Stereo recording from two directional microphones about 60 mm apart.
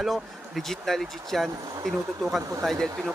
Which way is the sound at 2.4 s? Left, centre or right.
Right.